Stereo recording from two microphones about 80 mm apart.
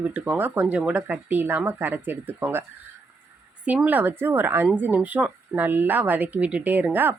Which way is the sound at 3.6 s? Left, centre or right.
Centre.